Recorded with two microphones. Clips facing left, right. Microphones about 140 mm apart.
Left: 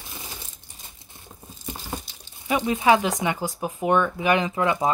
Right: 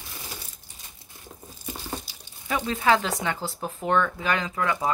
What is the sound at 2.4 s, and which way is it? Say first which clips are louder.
Speech: left 4 dB; 15° left (ahead or behind).